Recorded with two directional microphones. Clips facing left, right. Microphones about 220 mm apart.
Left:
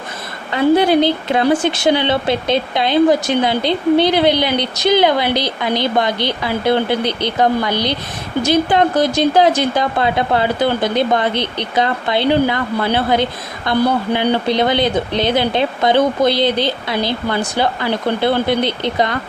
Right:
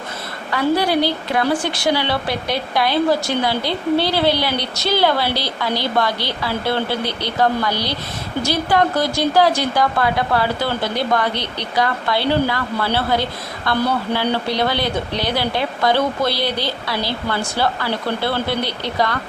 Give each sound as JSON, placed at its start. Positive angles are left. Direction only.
{"t": 0.5, "sound": "speech", "side_deg": 20}